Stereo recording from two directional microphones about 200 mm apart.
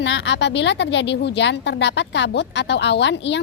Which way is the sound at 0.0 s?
65° left (ahead or behind).